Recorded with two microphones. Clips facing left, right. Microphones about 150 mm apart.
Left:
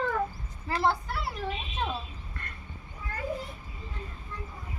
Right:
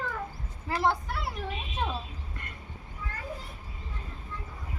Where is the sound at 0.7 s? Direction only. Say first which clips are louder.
Even; 15° right (ahead or behind).